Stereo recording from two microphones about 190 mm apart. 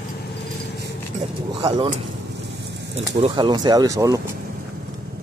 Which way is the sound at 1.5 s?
25° right (ahead or behind).